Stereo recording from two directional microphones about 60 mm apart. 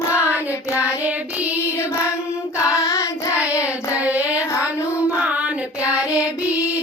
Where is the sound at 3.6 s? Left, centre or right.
Right.